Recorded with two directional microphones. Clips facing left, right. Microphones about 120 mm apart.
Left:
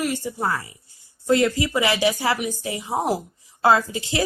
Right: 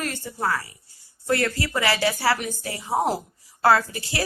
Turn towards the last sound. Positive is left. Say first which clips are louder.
# left 2 dB
turn(degrees=20)  # may be behind; listen again after turning